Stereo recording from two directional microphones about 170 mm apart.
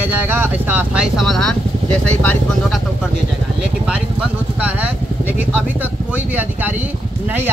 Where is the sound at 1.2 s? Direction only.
Centre (ahead or behind).